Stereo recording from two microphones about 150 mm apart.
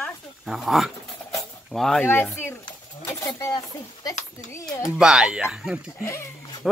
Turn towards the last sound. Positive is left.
turn(degrees=-5)  # may be behind; listen again after turning